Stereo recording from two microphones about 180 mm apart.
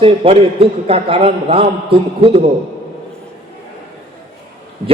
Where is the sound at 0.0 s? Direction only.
30° right (ahead or behind).